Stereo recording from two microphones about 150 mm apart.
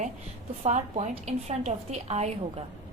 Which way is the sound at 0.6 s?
50° right (ahead or behind).